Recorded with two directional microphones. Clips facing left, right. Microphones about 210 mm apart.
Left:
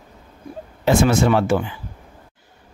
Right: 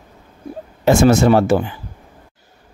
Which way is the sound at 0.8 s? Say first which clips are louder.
Right 4 dB; 45° right (ahead or behind).